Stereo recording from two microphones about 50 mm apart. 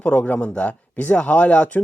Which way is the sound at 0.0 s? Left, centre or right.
Left.